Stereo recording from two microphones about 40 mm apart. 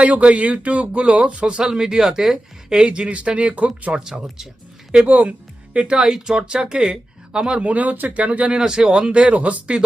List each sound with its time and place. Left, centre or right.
0.0 s speech: right
1.6 s speech: centre
2.7 s speech: right
4.0 s speech: centre
5.0 s speech: right
5.7 s speech: right
7.6 s speech: right
8.5 s speech: centre; by 9.7 s right